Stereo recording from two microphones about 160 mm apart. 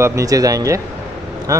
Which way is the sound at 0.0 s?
20° right (ahead or behind).